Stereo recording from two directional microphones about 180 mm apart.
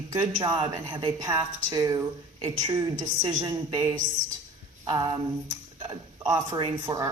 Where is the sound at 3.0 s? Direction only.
25° right (ahead or behind).